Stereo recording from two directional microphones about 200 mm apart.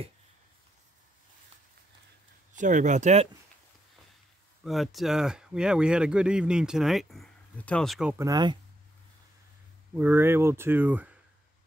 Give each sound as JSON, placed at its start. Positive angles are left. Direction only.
{"t": 2.5, "sound": "speech", "side_deg": -40}
{"t": 4.6, "sound": "speech", "side_deg": 0}
{"t": 9.9, "sound": "speech", "side_deg": -10}